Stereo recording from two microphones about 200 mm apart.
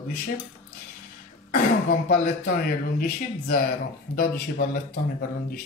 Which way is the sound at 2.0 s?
40° left (ahead or behind).